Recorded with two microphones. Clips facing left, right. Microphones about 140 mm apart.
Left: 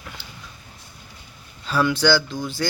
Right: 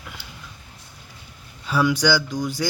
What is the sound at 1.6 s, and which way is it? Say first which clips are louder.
Mantra: left 1 dB; 10° right (ahead or behind).